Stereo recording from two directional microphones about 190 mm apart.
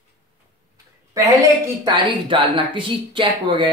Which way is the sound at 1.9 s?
25° right (ahead or behind).